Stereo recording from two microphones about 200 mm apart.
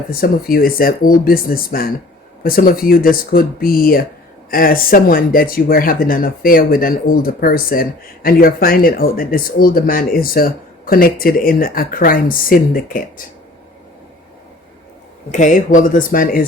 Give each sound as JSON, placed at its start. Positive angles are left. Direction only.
{"t": 0.1, "sound": "speech", "side_deg": 45}
{"t": 15.3, "sound": "speech", "side_deg": 40}